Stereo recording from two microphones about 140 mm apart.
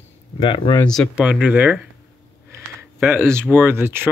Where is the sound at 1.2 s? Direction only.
10° right (ahead or behind).